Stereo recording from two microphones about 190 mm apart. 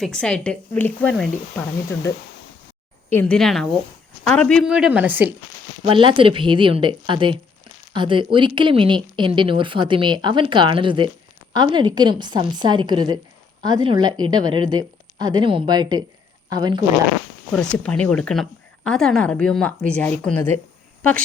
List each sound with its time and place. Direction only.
0.0 s speech: 5° left (ahead or behind)
5.8 s a woman's voice: 25° right (ahead or behind)
17.5 s speech: 5° left (ahead or behind)